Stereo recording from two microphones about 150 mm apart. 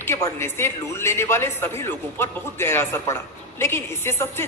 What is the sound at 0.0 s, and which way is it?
A woman's voice, 15° left (ahead or behind).